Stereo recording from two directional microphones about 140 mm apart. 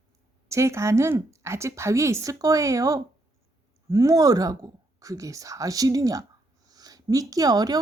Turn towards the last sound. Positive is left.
turn(degrees=-30)  # may be behind; listen again after turning